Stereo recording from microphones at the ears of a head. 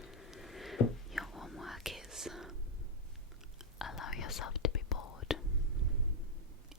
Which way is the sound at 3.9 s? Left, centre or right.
Left.